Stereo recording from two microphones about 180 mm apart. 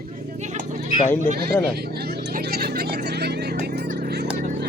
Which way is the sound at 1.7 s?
60° right (ahead or behind).